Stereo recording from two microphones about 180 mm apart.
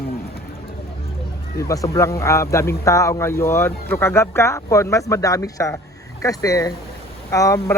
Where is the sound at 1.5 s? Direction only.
20° left (ahead or behind).